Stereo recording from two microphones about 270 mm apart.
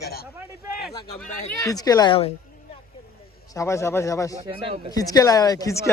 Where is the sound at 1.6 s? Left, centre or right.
Centre.